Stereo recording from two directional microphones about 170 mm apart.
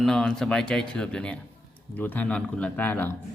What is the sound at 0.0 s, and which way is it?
A man's voice, 5° left (ahead or behind).